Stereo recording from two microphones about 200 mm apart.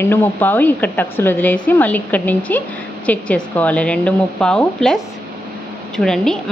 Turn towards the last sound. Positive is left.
turn(degrees=0)  # may be behind; listen again after turning